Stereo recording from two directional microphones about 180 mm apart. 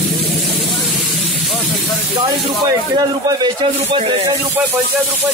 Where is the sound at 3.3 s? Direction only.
25° right (ahead or behind).